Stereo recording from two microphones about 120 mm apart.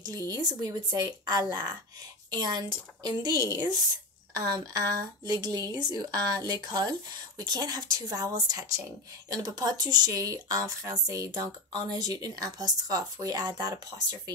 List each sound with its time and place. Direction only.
0.0 s a woman's voice: 30° right (ahead or behind)